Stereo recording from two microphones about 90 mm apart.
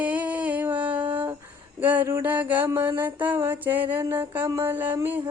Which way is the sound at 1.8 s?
20° right (ahead or behind).